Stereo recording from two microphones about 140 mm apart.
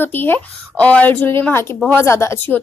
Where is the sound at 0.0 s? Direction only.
15° left (ahead or behind).